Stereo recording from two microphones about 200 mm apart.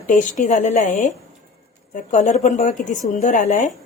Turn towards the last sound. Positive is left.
turn(degrees=40)  # may be behind; listen again after turning